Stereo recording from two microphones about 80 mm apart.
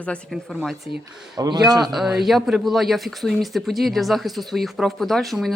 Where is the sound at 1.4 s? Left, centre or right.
Right.